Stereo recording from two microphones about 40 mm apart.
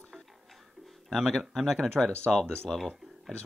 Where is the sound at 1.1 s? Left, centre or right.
Centre.